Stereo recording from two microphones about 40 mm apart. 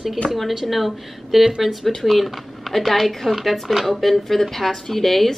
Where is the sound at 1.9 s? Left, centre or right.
Centre.